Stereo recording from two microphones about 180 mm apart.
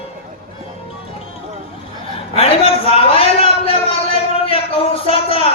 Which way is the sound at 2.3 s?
30° left (ahead or behind).